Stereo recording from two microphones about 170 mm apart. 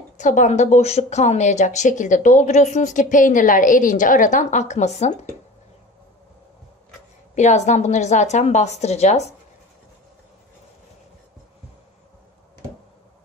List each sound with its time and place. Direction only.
0.2 s speech: 45° left (ahead or behind)
7.3 s speech: 45° left (ahead or behind)